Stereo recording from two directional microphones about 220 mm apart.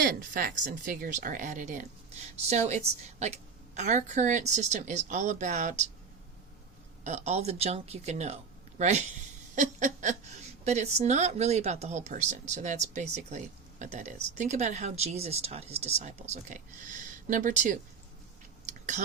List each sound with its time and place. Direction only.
0.0 s speech: 40° right (ahead or behind)
7.0 s speech: 30° right (ahead or behind)